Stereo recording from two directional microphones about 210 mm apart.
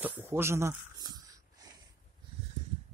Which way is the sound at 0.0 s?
10° right (ahead or behind).